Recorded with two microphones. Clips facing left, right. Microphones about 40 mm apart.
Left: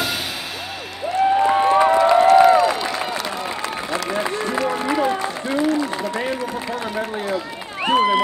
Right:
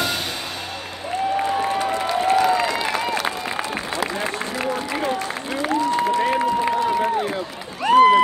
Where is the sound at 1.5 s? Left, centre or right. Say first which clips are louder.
Left 7 dB; left.